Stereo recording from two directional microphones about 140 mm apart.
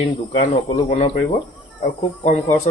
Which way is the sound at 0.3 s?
55° left (ahead or behind).